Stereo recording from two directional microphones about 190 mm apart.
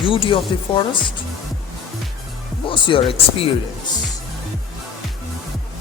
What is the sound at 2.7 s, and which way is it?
Speech, 25° left (ahead or behind).